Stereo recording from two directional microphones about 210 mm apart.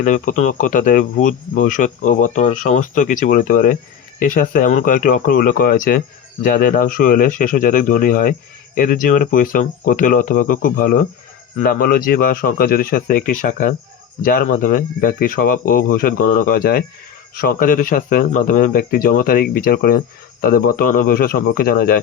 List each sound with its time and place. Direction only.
0.0 s speech: 35° left (ahead or behind)